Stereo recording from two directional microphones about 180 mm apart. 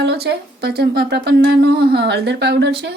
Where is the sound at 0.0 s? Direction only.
65° right (ahead or behind).